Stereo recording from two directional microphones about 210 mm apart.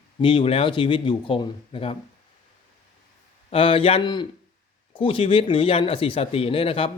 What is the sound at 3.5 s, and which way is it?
Speech, 25° left (ahead or behind).